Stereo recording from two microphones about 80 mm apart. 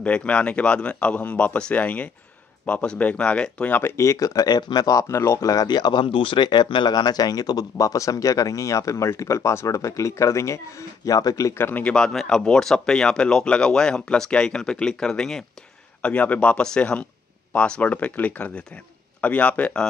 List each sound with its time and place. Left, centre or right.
0.0 s speech: centre
3.7 s speech: left
5.0 s speech: left
11.1 s speech: left
11.5 s speech: left